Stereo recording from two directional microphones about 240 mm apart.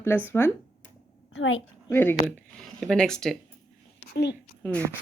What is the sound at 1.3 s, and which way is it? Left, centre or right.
Speech, left.